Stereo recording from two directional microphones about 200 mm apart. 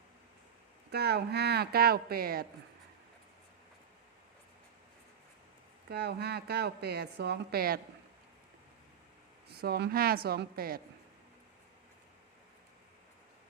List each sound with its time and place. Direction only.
0.9 s speech: 55° right (ahead or behind)
5.9 s a woman's voice: 55° right (ahead or behind)
9.5 s speech: 55° right (ahead or behind)